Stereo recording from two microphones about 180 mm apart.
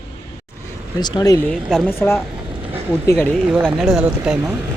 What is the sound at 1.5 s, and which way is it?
Speech, centre (ahead or behind).